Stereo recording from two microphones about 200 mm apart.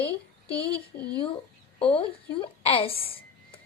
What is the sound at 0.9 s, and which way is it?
Speech, 40° left (ahead or behind).